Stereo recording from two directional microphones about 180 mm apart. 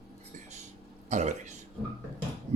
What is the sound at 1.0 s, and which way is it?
Speech, 40° right (ahead or behind).